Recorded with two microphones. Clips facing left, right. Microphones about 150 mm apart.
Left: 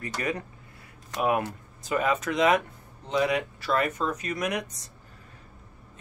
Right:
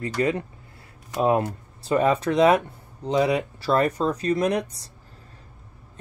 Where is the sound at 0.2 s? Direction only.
25° right (ahead or behind).